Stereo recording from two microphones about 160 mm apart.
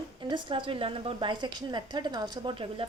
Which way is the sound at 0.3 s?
30° right (ahead or behind).